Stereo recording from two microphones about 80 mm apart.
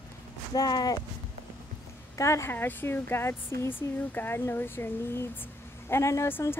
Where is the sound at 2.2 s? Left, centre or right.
Left.